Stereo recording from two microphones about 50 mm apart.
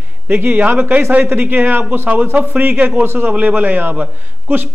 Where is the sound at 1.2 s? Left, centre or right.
Right.